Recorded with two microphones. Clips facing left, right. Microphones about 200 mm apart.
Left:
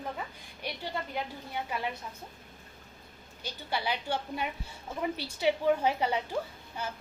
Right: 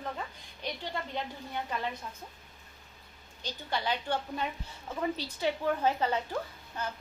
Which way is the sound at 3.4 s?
10° left (ahead or behind).